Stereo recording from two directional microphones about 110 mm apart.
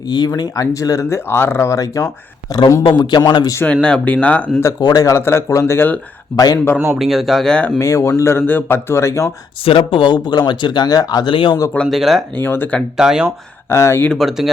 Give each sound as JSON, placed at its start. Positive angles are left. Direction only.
{"t": 0.1, "sound": "a man's voice", "side_deg": 40}
{"t": 2.8, "sound": "a man's voice", "side_deg": 40}
{"t": 3.6, "sound": "speech", "side_deg": 10}
{"t": 4.8, "sound": "speech", "side_deg": 35}
{"t": 6.3, "sound": "a man's voice", "side_deg": 35}
{"t": 6.7, "sound": "speech", "side_deg": -20}
{"t": 7.0, "sound": "speech", "side_deg": 0}
{"t": 7.8, "sound": "speech", "side_deg": 30}
{"t": 9.6, "sound": "speech", "side_deg": 55}
{"t": 11.9, "sound": "speech", "side_deg": 0}
{"t": 12.4, "sound": "speech", "side_deg": 20}
{"t": 13.0, "sound": "speech", "side_deg": -5}
{"t": 13.7, "sound": "speech", "side_deg": 25}
{"t": 14.0, "sound": "speech", "side_deg": 5}